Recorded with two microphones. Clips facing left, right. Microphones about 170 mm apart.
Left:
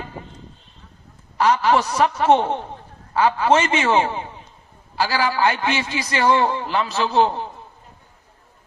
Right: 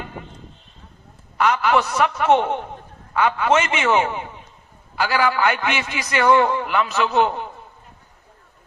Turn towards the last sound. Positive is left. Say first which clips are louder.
# even
turn(degrees=30)  # may be behind; listen again after turning